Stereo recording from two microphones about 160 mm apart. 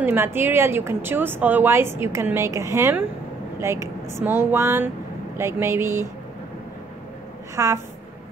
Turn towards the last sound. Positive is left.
turn(degrees=-20)  # may be behind; listen again after turning